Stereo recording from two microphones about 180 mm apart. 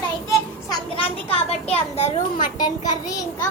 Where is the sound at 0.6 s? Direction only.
25° left (ahead or behind).